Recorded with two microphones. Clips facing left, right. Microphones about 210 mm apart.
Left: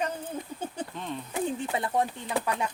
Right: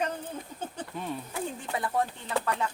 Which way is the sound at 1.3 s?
20° left (ahead or behind).